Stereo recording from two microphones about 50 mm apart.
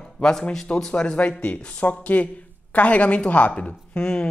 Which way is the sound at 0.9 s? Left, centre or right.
Left.